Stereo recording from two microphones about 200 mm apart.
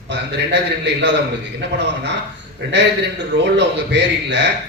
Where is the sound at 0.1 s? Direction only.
60° right (ahead or behind).